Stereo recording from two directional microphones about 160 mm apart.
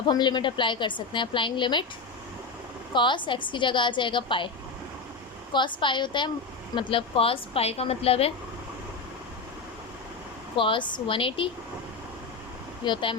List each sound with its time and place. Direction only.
0.1 s a woman's voice: 25° left (ahead or behind)
2.9 s a woman's voice: 30° left (ahead or behind)
5.5 s a woman's voice: 30° left (ahead or behind)
10.6 s a woman's voice: 30° left (ahead or behind)
12.8 s a woman's voice: 30° left (ahead or behind)